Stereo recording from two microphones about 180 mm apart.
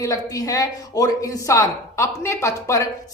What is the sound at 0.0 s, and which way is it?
Speech, 20° left (ahead or behind).